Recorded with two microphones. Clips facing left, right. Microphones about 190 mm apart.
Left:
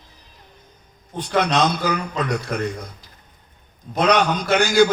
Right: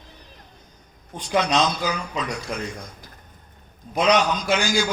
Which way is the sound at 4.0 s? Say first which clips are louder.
Left 2 dB; 60° left (ahead or behind).